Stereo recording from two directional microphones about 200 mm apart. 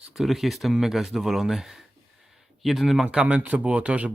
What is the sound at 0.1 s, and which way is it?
Speech, centre (ahead or behind).